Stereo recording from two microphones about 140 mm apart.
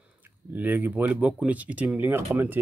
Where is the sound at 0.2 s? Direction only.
15° right (ahead or behind).